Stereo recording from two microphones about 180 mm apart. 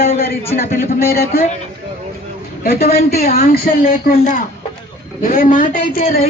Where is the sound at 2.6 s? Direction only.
60° left (ahead or behind).